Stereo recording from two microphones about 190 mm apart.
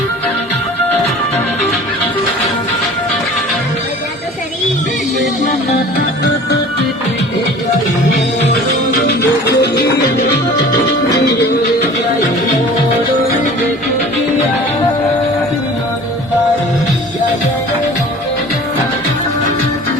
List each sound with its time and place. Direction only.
9.6 s music: 60° left (ahead or behind)